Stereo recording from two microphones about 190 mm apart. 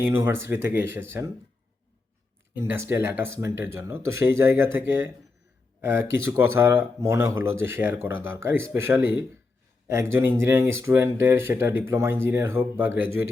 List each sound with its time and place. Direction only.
0.0 s speech: 10° right (ahead or behind)
2.6 s speech: 15° right (ahead or behind)